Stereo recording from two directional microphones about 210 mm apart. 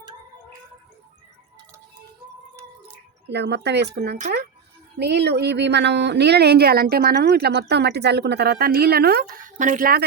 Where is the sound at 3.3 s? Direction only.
55° right (ahead or behind).